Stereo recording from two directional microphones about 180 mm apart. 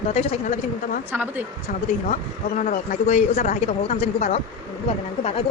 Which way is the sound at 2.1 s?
45° left (ahead or behind).